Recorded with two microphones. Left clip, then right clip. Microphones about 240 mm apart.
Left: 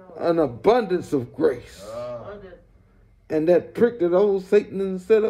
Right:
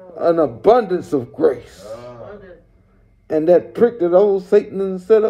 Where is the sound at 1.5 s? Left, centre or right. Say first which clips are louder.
Right 5 dB; right.